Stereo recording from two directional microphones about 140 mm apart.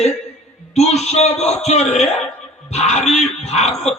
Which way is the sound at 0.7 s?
50° left (ahead or behind).